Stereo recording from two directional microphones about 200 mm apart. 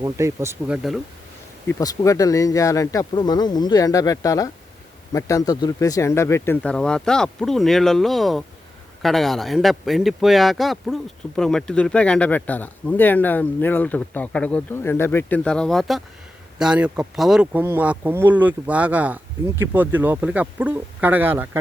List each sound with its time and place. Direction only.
0.0 s speech: 15° right (ahead or behind)
1.8 s a man's voice: 15° left (ahead or behind); by 21.6 s 10° right (ahead or behind)